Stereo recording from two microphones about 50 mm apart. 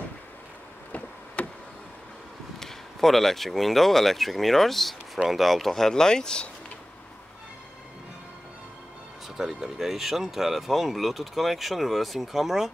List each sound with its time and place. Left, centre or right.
0.9 s a sound: left
2.6 s speech: centre
9.4 s speech: centre